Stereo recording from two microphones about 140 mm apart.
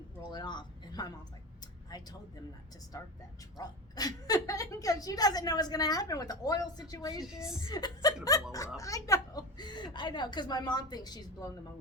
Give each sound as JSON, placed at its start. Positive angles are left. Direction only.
{"t": 0.2, "sound": "speech", "side_deg": 30}
{"t": 2.9, "sound": "a woman's voice", "side_deg": 25}